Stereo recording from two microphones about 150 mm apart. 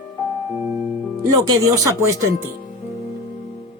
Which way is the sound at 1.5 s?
20° right (ahead or behind).